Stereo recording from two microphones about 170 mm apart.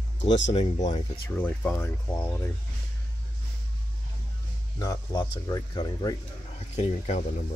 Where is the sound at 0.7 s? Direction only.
45° left (ahead or behind).